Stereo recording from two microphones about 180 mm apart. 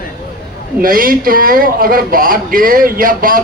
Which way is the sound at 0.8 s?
50° right (ahead or behind).